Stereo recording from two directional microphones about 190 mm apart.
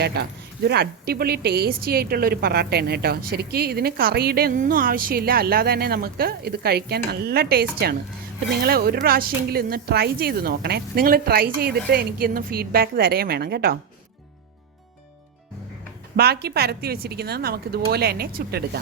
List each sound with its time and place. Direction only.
0.0 s speech: 60° right (ahead or behind)
16.1 s speech: 55° right (ahead or behind)